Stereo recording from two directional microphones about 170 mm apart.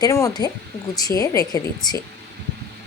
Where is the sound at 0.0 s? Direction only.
20° left (ahead or behind).